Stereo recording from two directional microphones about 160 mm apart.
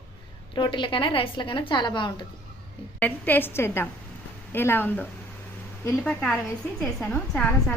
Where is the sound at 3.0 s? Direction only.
10° left (ahead or behind).